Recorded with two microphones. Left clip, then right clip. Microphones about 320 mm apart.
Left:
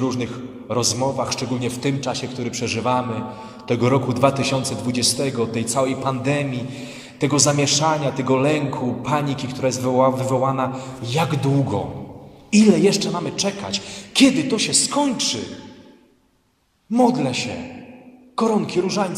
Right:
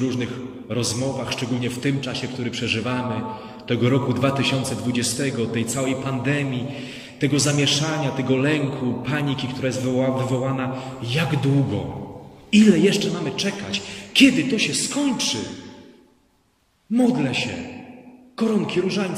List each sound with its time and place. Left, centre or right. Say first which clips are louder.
0.1 s a man's voice: left 1 dB; centre
16.9 s a man's voice: left 3 dB; centre